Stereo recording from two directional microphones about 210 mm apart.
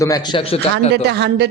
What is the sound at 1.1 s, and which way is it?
Speech, 55° right (ahead or behind).